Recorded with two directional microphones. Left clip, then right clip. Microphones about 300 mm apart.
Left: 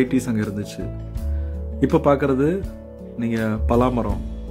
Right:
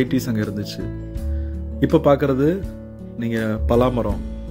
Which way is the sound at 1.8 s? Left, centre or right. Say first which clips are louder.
Right 2 dB; centre.